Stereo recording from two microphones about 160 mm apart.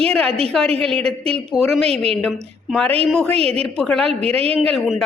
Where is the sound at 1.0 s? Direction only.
40° right (ahead or behind).